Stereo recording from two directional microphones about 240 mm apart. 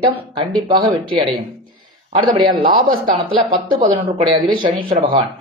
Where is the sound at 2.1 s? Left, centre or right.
Right.